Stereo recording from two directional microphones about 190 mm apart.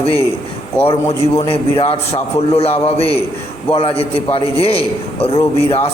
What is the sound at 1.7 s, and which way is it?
A man's voice, 30° left (ahead or behind).